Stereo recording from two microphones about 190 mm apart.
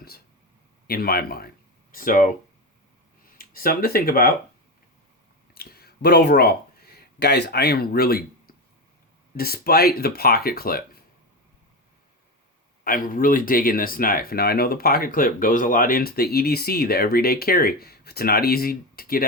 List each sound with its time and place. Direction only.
0.9 s speech: 50° left (ahead or behind)
3.3 s speech: 50° left (ahead or behind)
5.5 s speech: 55° left (ahead or behind)
12.8 s speech: 50° left (ahead or behind)